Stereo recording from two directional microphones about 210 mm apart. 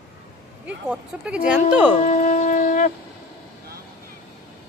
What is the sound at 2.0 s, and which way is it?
Shofar, 35° left (ahead or behind).